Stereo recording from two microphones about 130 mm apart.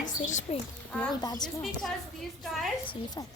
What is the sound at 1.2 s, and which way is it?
Speech, 30° left (ahead or behind).